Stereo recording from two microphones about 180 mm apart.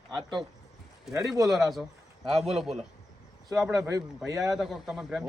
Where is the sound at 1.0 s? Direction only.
Centre (ahead or behind).